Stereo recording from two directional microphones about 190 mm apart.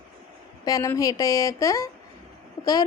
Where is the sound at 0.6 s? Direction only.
20° left (ahead or behind).